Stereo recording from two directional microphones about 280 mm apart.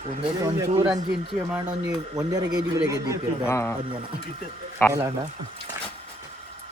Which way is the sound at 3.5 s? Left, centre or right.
Centre.